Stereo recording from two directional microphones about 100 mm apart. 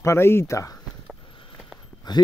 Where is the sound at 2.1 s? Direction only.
45° left (ahead or behind).